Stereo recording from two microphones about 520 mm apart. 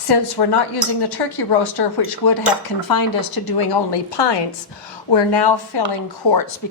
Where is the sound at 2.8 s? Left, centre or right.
Left.